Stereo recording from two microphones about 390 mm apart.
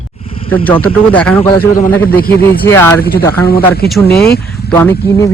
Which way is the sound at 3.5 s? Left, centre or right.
Left.